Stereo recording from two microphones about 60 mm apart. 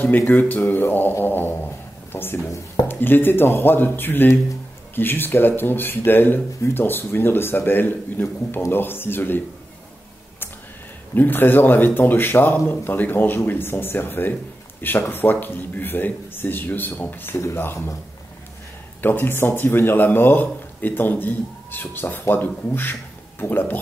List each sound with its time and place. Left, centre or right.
0.3 s speech: left
2.5 s speech: left
2.9 s speech: left
11.1 s speech: left
19.0 s speech: left